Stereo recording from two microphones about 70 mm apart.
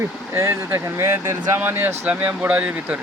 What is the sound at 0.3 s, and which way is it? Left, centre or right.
Speech, right.